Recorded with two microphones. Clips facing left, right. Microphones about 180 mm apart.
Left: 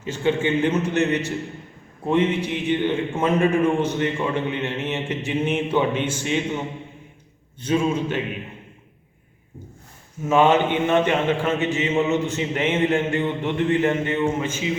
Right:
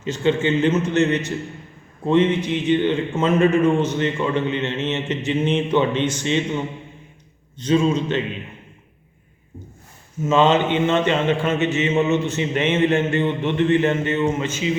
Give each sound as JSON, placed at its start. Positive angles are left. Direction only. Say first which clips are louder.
{"t": 0.0, "sound": "a man's voice", "louder": "right 2 dB", "side_deg": 10}
{"t": 7.6, "sound": "a man's voice", "louder": "right 3 dB", "side_deg": 10}
{"t": 10.2, "sound": "a man's voice", "louder": "right 1 dB", "side_deg": 10}